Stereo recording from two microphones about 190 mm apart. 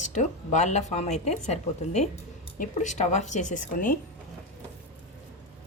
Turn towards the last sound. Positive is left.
turn(degrees=45)  # may be behind; listen again after turning